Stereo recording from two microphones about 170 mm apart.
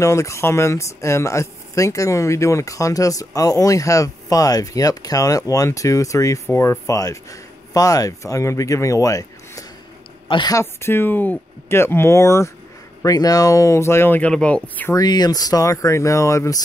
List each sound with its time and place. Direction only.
0.0 s speech: 15° left (ahead or behind)
15.0 s speech: 25° left (ahead or behind)